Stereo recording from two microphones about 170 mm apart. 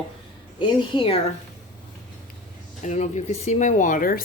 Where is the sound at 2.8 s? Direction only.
45° left (ahead or behind).